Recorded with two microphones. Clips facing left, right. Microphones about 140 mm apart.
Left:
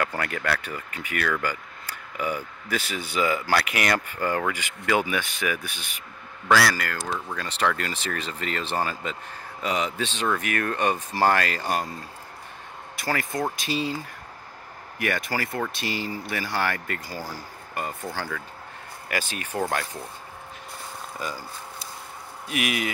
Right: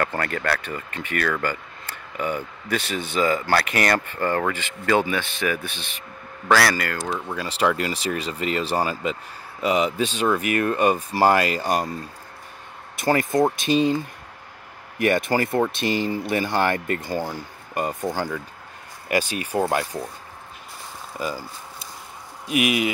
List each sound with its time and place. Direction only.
0.0 s speech: 5° left (ahead or behind)
6.5 s speech: 5° right (ahead or behind)
12.9 s speech: 20° right (ahead or behind)
15.0 s speech: 25° right (ahead or behind)
22.5 s speech: 15° right (ahead or behind)